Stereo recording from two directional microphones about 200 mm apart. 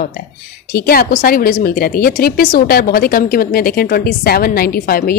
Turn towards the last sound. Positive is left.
turn(degrees=50)  # may be behind; listen again after turning